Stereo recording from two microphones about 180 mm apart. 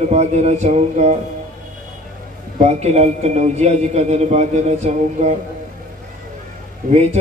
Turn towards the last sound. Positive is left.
turn(degrees=-50)  # may be behind; listen again after turning